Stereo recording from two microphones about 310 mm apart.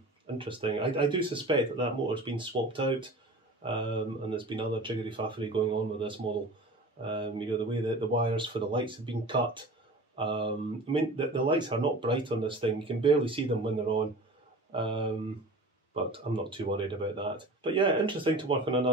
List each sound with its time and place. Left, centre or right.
0.4 s speech: centre
14.7 s speech: centre